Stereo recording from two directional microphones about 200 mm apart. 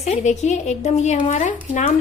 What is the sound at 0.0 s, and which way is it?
Female singing, 35° left (ahead or behind).